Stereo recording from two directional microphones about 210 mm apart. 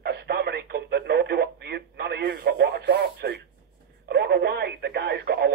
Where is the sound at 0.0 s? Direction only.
50° right (ahead or behind).